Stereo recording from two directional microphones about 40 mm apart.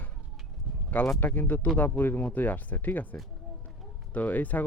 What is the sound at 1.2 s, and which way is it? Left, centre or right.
Speech, left.